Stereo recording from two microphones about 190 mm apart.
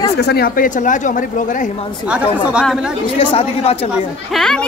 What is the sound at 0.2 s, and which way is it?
Speech, 55° left (ahead or behind).